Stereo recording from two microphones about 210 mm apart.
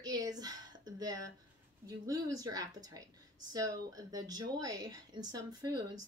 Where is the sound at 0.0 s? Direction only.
20° right (ahead or behind).